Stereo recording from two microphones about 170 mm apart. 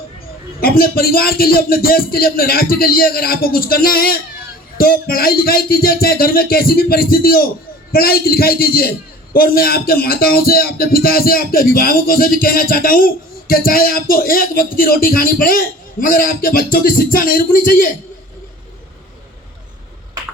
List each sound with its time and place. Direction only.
0.6 s speech: 60° left (ahead or behind)